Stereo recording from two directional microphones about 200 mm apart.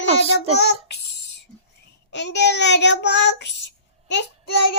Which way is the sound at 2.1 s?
60° left (ahead or behind).